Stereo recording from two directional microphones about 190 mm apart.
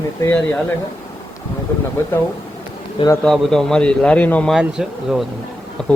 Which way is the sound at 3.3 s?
5° left (ahead or behind).